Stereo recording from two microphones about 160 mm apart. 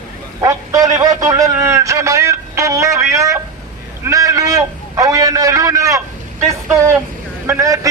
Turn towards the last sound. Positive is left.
turn(degrees=-20)  # may be behind; listen again after turning